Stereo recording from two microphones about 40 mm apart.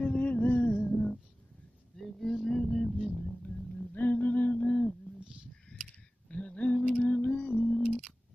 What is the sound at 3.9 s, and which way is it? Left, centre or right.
Music, left.